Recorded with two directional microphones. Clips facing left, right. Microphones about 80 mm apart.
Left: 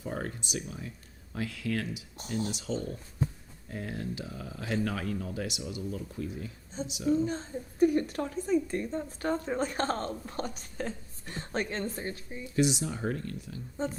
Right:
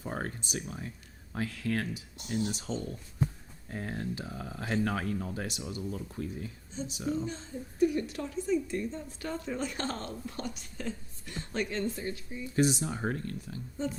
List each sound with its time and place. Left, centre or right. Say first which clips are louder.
0.0 s a sound: left 1 dB; right
1.3 s speech: even; right
7.3 s speech: left 4 dB; left
12.5 s speech: even; right
13.8 s speech: left 1 dB; left